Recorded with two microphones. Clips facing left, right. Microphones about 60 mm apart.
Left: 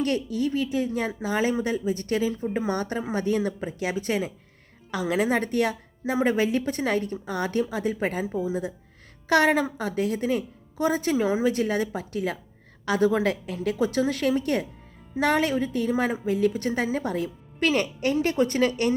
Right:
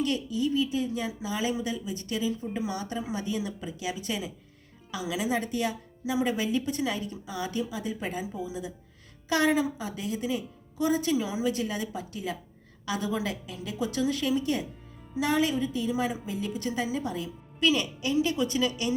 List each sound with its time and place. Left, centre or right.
0.0 s speech: left